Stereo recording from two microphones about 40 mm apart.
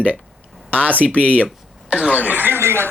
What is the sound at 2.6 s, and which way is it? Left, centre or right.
Speech, right.